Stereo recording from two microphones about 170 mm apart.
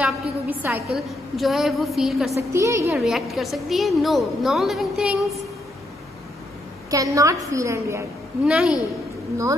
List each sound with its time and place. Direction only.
0.0 s a woman's voice: 10° right (ahead or behind)
0.9 s a woman's voice: centre (ahead or behind)
2.3 s a woman's voice: 15° right (ahead or behind)
3.0 s a woman's voice: centre (ahead or behind)
6.9 s a woman's voice: 20° right (ahead or behind)
8.5 s a woman's voice: 5° right (ahead or behind)